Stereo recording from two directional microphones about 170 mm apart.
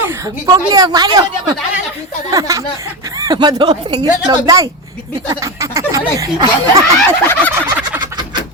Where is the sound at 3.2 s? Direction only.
25° right (ahead or behind).